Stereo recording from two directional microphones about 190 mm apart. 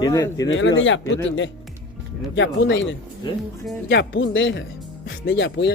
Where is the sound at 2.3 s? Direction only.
75° left (ahead or behind).